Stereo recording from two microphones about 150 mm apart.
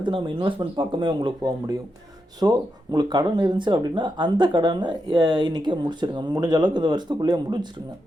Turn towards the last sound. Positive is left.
turn(degrees=-30)  # may be behind; listen again after turning